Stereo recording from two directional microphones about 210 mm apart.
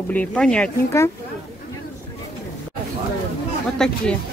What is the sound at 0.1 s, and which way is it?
Speech, 5° left (ahead or behind).